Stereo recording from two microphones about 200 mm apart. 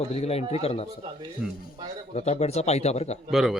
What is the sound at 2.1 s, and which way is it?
A man's voice, 30° left (ahead or behind).